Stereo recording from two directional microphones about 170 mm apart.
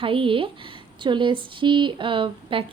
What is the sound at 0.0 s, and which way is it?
Speech, 30° right (ahead or behind).